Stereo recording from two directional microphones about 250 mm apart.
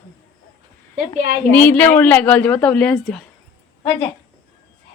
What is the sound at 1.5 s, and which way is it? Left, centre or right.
A woman's voice, centre.